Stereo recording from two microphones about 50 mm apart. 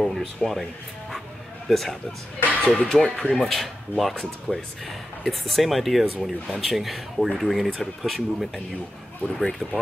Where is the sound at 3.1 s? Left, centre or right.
Centre.